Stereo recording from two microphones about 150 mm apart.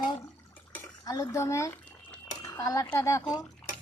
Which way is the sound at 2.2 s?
25° left (ahead or behind).